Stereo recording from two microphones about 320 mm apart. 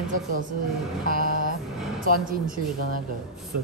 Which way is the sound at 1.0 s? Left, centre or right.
Right.